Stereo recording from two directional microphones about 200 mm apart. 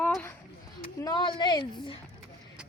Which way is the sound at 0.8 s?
25° left (ahead or behind).